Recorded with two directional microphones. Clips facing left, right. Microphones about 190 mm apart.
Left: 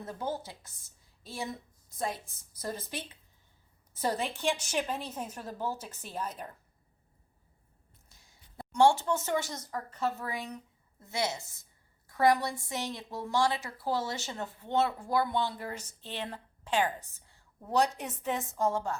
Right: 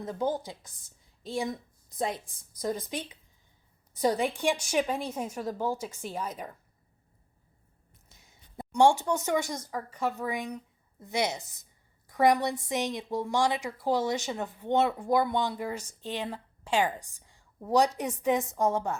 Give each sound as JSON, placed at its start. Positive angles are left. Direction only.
{"t": 0.0, "sound": "a woman's voice", "side_deg": -15}
{"t": 8.1, "sound": "a woman's voice", "side_deg": -20}